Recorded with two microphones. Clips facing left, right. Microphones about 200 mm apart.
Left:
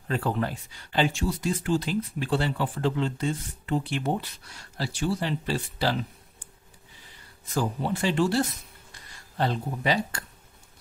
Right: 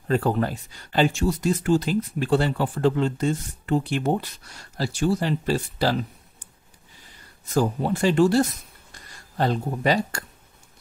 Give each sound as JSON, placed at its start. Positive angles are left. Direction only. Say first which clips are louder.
{"t": 0.1, "sound": "speech", "louder": "right 5 dB", "side_deg": -40}
{"t": 7.5, "sound": "speech", "louder": "right 5 dB", "side_deg": -40}